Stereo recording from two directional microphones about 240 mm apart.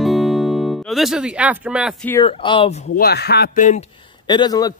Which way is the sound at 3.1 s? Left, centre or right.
Left.